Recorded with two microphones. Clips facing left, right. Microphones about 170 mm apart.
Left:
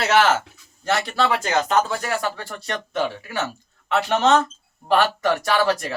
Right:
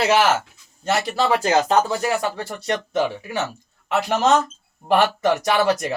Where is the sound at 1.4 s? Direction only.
35° right (ahead or behind).